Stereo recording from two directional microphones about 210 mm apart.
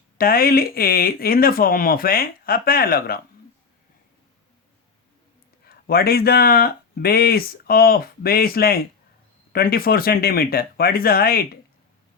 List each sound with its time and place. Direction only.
0.2 s speech: 45° left (ahead or behind)
5.6 s speech: 45° left (ahead or behind)